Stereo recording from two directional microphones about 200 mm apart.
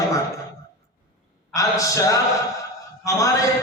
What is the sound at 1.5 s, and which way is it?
A man's voice, 15° left (ahead or behind).